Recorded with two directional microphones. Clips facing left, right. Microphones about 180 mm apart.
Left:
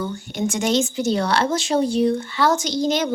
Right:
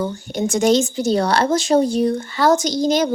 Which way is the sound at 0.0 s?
40° right (ahead or behind).